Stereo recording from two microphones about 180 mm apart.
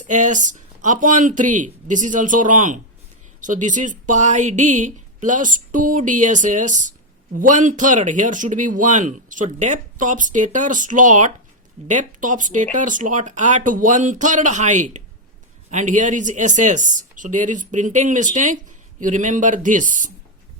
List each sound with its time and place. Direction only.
0.0 s speech: 45° right (ahead or behind)